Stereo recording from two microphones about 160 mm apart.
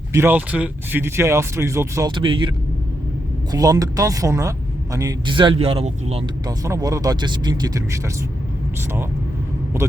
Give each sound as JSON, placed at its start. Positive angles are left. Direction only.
{"t": 0.1, "sound": "speech", "side_deg": -15}
{"t": 3.5, "sound": "speech", "side_deg": -20}
{"t": 6.7, "sound": "speech", "side_deg": -20}